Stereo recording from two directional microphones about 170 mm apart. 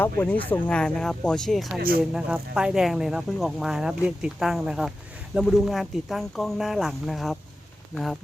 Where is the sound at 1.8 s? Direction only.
60° right (ahead or behind).